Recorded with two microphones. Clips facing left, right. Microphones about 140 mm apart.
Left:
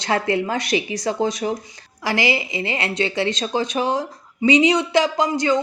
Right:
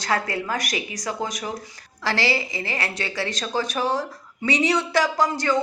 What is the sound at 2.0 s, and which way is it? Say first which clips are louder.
Speech: left 3 dB; 15° left (ahead or behind).